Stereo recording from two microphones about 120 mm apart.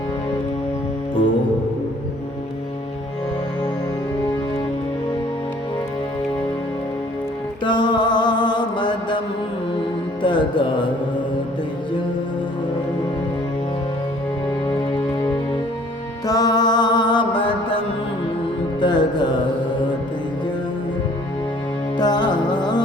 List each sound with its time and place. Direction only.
7.6 s mantra: 40° left (ahead or behind)
10.2 s music: 45° left (ahead or behind)
16.2 s music: 30° left (ahead or behind)
21.9 s music: 35° left (ahead or behind)